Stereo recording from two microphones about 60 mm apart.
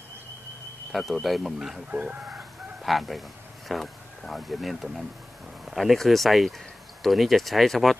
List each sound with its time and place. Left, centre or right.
0.9 s speech: centre
1.9 s speech: right
2.3 s chicken: centre
5.7 s speech: centre